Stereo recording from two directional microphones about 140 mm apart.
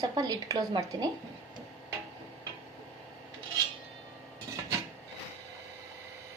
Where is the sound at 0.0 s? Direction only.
30° right (ahead or behind).